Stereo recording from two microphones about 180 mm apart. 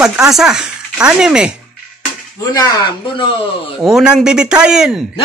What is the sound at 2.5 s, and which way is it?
Speech, 20° left (ahead or behind).